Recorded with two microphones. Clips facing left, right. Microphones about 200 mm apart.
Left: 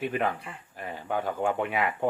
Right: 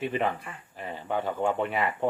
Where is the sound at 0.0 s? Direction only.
5° left (ahead or behind).